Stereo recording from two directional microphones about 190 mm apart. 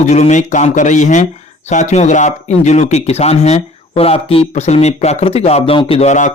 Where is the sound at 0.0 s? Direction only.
40° left (ahead or behind).